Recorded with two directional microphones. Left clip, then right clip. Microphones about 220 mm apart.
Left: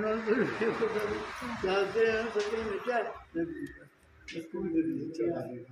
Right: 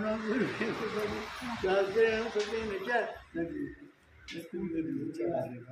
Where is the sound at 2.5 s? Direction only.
15° left (ahead or behind).